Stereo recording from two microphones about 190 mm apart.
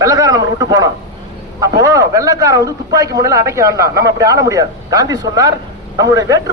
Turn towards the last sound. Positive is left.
turn(degrees=-20)  # may be behind; listen again after turning